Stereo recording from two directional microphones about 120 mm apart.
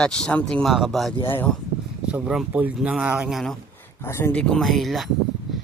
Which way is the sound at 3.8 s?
20° left (ahead or behind).